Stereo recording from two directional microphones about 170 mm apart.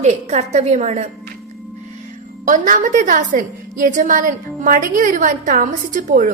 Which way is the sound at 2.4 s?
50° right (ahead or behind).